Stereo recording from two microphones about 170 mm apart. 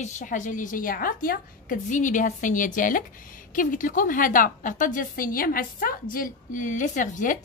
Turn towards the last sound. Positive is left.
turn(degrees=50)  # may be behind; listen again after turning